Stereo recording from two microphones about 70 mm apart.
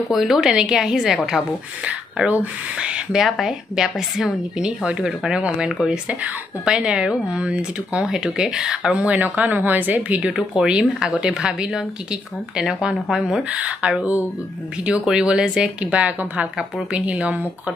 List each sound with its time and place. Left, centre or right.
0.1 s speech: centre
1.9 s speech: centre
10.6 s speech: centre